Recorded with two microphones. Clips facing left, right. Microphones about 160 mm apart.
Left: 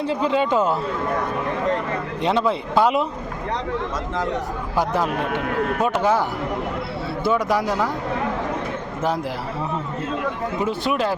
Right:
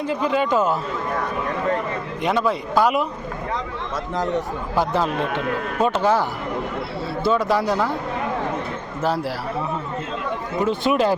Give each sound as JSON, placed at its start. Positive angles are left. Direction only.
{"t": 0.0, "sound": "speech", "side_deg": 25}
{"t": 2.2, "sound": "speech", "side_deg": 25}
{"t": 5.8, "sound": "speech", "side_deg": 15}
{"t": 7.3, "sound": "speech", "side_deg": 15}
{"t": 10.7, "sound": "speech", "side_deg": 0}